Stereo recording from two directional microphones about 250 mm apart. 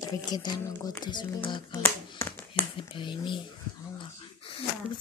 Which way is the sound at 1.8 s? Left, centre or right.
Centre.